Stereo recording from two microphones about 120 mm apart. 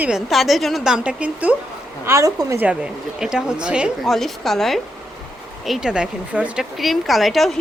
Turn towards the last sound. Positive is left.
turn(degrees=0)  # may be behind; listen again after turning